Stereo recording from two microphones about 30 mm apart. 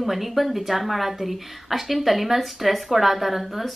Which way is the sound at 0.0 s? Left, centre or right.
Centre.